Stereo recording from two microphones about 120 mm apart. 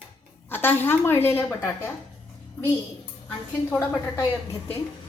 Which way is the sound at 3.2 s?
25° left (ahead or behind).